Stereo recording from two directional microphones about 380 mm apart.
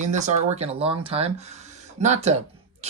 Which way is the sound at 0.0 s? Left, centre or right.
Centre.